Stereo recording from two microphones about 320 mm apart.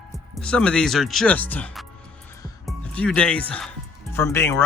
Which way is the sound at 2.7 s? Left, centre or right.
Centre.